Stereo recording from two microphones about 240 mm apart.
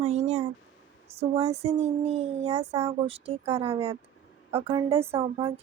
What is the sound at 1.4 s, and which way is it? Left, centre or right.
A woman's voice, right.